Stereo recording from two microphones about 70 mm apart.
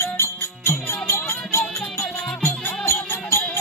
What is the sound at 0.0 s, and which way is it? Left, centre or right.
Music, left.